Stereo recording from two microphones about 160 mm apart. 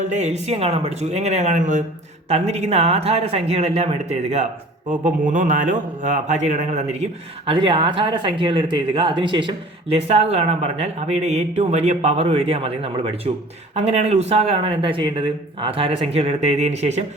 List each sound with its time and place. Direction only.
0.0 s speech: 45° right (ahead or behind)
4.9 s speech: 55° right (ahead or behind)
7.5 s speech: 35° right (ahead or behind)